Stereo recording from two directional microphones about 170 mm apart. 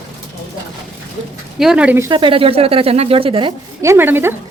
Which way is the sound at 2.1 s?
30° right (ahead or behind).